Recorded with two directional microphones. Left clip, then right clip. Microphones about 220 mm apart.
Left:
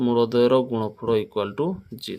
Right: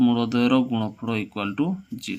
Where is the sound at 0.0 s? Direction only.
45° left (ahead or behind).